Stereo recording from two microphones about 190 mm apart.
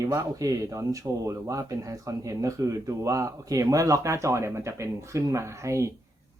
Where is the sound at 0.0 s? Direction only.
15° right (ahead or behind).